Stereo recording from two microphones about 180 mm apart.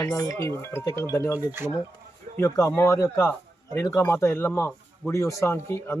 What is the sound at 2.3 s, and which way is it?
Speech, 15° left (ahead or behind).